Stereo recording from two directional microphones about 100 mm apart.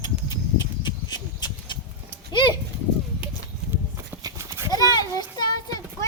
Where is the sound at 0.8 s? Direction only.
45° left (ahead or behind).